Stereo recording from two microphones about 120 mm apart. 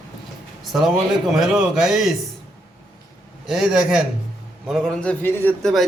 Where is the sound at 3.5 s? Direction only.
5° right (ahead or behind); by 5.5 s 15° left (ahead or behind).